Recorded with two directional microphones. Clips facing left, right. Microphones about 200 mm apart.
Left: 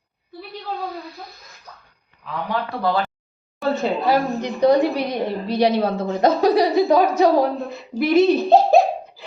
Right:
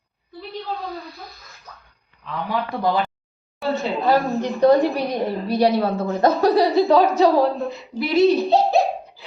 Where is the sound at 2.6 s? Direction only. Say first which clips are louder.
Right 1 dB; 15° right (ahead or behind).